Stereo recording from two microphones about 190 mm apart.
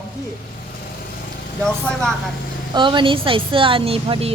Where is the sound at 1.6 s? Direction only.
5° left (ahead or behind).